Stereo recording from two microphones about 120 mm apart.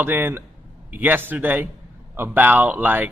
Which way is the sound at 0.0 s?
20° right (ahead or behind).